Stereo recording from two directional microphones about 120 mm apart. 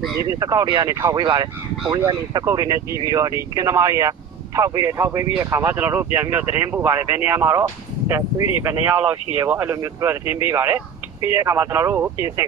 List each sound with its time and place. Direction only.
0.2 s speech: 25° right (ahead or behind)
1.1 s speech: 35° right (ahead or behind); by 7.6 s 20° right (ahead or behind)
8.6 s speech: 15° right (ahead or behind)